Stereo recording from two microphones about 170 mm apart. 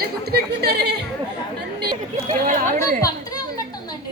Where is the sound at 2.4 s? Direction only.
50° right (ahead or behind).